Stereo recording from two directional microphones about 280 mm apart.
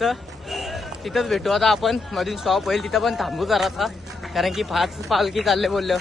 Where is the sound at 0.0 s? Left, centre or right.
Centre.